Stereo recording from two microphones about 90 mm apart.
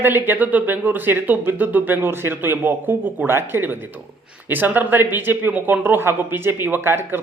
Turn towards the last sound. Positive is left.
turn(degrees=-25)  # may be behind; listen again after turning